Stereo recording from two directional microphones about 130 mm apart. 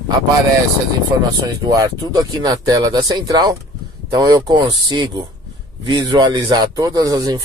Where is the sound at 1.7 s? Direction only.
30° right (ahead or behind).